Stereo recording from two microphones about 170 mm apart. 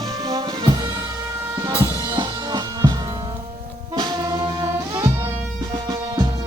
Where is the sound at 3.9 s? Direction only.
25° right (ahead or behind).